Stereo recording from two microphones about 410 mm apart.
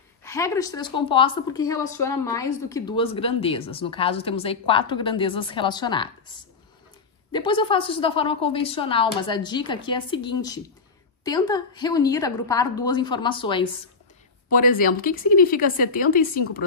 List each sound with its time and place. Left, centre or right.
0.2 s a woman's voice: centre
7.3 s a woman's voice: centre